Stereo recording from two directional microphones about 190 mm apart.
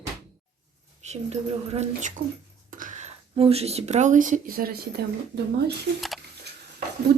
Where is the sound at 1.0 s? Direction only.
35° right (ahead or behind); by 5.0 s 50° right (ahead or behind).